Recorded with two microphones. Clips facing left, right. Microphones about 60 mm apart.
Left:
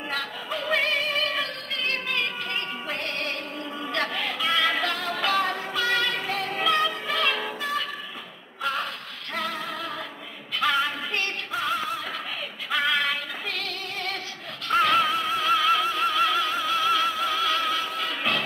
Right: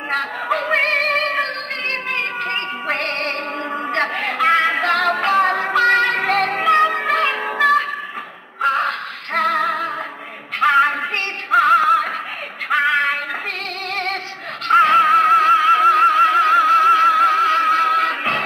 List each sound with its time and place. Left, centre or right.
0.1 s music: right
5.5 s music: right
6.6 s music: right
7.2 s music: right
7.5 s music: right
8.5 s music: right
10.6 s music: right
12.6 s female singing: right
14.7 s music: right
15.1 s music: right
15.5 s music: right
15.9 s music: right